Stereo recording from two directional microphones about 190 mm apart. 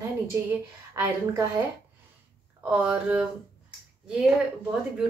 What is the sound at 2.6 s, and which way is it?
A woman's voice, 5° right (ahead or behind).